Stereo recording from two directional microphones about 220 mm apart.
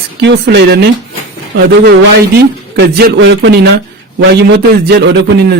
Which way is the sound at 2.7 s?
50° right (ahead or behind).